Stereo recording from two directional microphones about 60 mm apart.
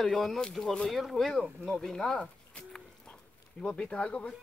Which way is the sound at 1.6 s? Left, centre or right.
Centre.